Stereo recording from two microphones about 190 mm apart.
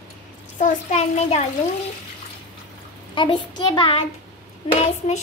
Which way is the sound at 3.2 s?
25° left (ahead or behind).